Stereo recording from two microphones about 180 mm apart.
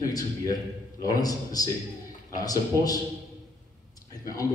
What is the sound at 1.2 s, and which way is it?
A man's voice, 20° left (ahead or behind).